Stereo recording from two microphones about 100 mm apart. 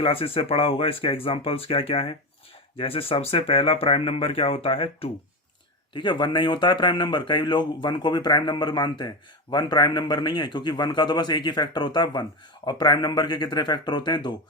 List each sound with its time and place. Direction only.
0.0 s speech: 65° left (ahead or behind)
5.9 s speech: 50° left (ahead or behind)